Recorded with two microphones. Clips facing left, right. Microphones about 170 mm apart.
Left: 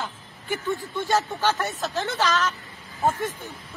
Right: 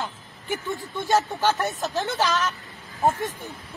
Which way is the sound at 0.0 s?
15° right (ahead or behind).